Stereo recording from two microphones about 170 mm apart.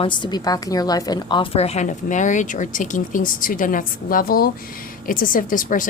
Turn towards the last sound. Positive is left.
turn(degrees=50)  # may be behind; listen again after turning